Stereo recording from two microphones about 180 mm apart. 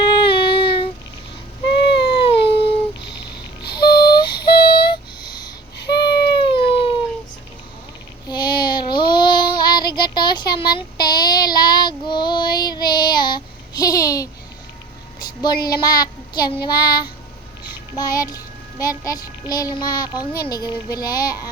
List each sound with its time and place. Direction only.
0.1 s child singing: 25° left (ahead or behind)
1.7 s a sound: 30° left (ahead or behind)
5.9 s baby cry: 25° left (ahead or behind)
8.3 s child singing: 25° left (ahead or behind)
17.9 s music: 20° left (ahead or behind)
18.8 s a child's voice: 20° left (ahead or behind)